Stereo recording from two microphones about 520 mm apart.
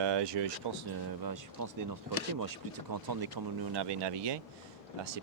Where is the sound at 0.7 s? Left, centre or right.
Right.